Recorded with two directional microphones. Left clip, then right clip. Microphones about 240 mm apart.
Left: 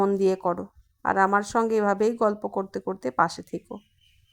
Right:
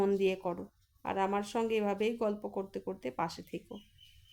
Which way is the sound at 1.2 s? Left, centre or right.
Left.